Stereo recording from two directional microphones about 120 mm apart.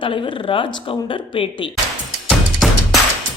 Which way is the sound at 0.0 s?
45° left (ahead or behind).